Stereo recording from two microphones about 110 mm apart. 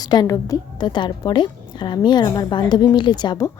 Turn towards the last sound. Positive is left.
turn(degrees=40)  # may be behind; listen again after turning